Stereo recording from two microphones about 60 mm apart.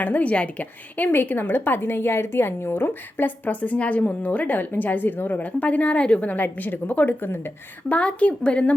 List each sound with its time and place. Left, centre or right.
0.0 s a woman's voice: left
7.9 s a woman's voice: left